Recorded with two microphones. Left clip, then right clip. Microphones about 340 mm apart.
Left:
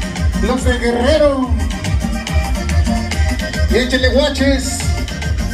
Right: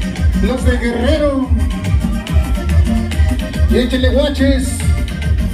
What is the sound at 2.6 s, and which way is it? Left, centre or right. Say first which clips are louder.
Music: left 1 dB; left.